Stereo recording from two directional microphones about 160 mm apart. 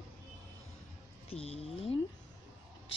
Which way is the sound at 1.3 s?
35° left (ahead or behind).